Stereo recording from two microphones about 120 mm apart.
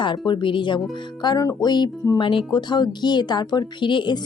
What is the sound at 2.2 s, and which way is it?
Speech, 45° left (ahead or behind).